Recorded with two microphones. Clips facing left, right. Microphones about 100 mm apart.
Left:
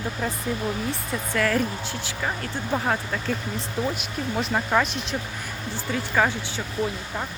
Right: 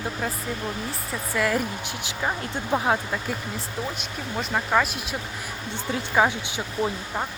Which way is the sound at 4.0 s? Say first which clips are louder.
Left 3 dB; centre (ahead or behind).